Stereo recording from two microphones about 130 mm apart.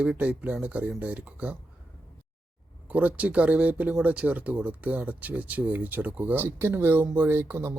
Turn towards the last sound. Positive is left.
turn(degrees=-15)  # may be behind; listen again after turning